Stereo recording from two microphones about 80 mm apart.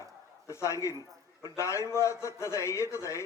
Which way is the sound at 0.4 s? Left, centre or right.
Left.